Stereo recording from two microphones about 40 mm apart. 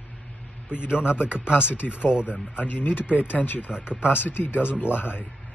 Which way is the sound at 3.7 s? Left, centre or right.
Right.